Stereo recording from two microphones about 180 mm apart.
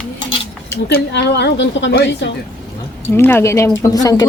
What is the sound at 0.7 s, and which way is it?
A woman's voice, 75° left (ahead or behind).